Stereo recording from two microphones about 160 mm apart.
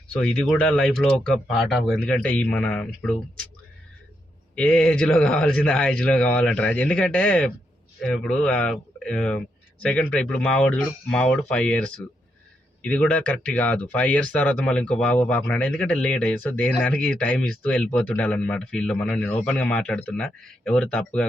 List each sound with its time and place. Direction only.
0.1 s speech: 5° left (ahead or behind)
4.5 s speech: 5° left (ahead or behind)
12.8 s speech: 10° left (ahead or behind)